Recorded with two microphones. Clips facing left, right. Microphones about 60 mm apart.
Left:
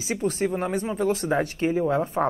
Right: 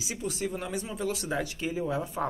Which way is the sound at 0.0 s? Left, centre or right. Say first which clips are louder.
Left 8 dB; left.